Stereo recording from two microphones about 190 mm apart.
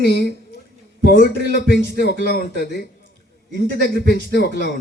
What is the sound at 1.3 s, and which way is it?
Music, 60° right (ahead or behind).